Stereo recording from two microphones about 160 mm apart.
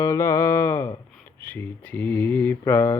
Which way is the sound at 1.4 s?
10° left (ahead or behind).